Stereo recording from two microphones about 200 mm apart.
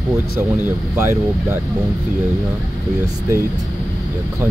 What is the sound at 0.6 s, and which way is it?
Speech, 10° right (ahead or behind).